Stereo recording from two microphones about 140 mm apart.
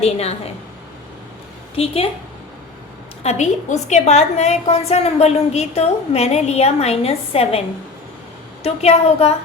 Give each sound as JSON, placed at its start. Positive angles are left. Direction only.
{"t": 0.0, "sound": "a woman's voice", "side_deg": 45}
{"t": 1.7, "sound": "a woman's voice", "side_deg": 45}
{"t": 3.2, "sound": "a woman's voice", "side_deg": 55}
{"t": 8.6, "sound": "a woman's voice", "side_deg": 50}